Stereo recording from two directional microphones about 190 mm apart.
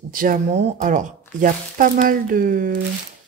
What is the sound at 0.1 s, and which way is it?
A woman's voice, 45° right (ahead or behind).